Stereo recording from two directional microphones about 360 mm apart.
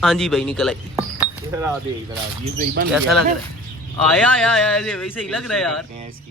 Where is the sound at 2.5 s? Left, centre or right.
Right.